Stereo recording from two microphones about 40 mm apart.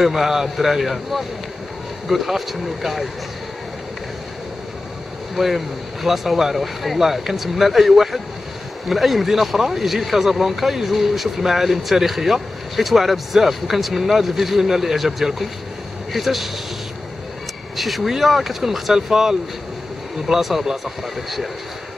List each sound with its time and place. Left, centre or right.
0.0 s speech: centre
5.3 s speech: centre
17.7 s speech: centre